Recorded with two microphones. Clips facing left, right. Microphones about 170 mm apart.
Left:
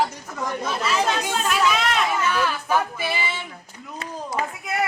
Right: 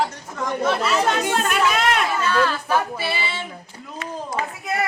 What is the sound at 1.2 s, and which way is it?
Speech, 60° right (ahead or behind).